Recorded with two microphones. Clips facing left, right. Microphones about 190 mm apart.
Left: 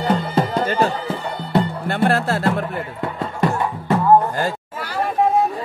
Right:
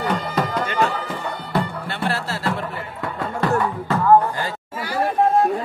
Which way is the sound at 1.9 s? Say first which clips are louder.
Left 7 dB; 55° left (ahead or behind).